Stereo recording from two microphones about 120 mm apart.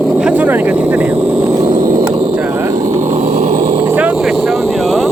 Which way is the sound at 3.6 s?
45° right (ahead or behind).